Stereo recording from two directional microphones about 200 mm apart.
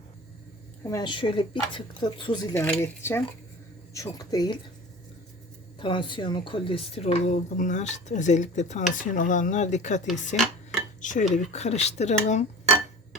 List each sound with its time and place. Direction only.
0.9 s a woman's voice: 20° left (ahead or behind)
5.8 s a woman's voice: 25° left (ahead or behind)
10.1 s dishes: centre (ahead or behind)
11.0 s dishes: 40° left (ahead or behind)
11.5 s a woman's voice: 35° left (ahead or behind)